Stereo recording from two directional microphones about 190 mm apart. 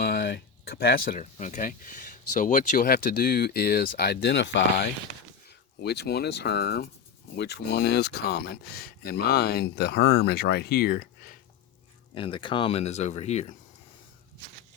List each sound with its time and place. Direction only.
0.0 s speech: 55° left (ahead or behind)
12.1 s speech: 25° left (ahead or behind)